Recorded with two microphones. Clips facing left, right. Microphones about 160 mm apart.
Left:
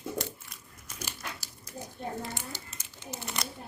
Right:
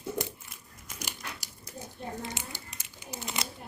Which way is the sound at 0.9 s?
15° right (ahead or behind).